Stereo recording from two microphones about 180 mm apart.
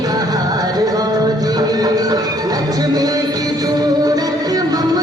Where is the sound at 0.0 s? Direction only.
20° right (ahead or behind).